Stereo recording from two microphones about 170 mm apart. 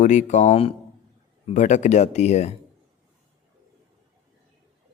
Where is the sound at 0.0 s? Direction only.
45° left (ahead or behind).